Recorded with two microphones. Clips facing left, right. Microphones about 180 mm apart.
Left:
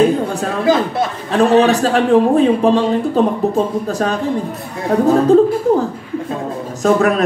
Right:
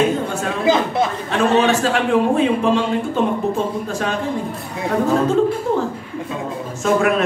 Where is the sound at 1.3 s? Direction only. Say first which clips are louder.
Left 5 dB; 35° left (ahead or behind).